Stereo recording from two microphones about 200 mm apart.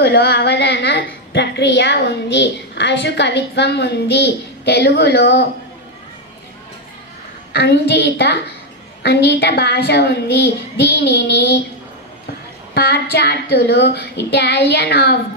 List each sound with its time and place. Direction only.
0.0 s a woman's voice: 55° left (ahead or behind)
7.5 s a woman's voice: 55° left (ahead or behind)
9.0 s child singing: 55° left (ahead or behind)
12.7 s child singing: 50° left (ahead or behind)